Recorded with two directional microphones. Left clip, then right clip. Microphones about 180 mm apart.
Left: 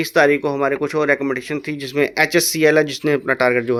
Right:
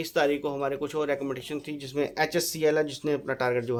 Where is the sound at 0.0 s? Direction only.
25° left (ahead or behind).